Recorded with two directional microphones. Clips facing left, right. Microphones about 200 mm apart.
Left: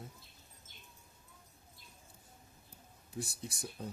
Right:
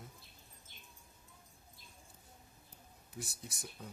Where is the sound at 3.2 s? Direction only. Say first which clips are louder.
Left 6 dB; 30° left (ahead or behind).